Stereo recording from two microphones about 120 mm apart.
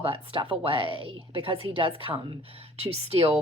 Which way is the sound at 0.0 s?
50° right (ahead or behind).